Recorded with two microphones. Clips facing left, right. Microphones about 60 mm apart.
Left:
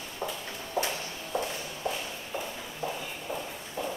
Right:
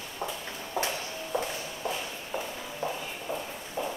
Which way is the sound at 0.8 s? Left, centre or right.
Right.